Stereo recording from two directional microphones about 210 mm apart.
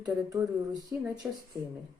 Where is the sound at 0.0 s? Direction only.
20° right (ahead or behind).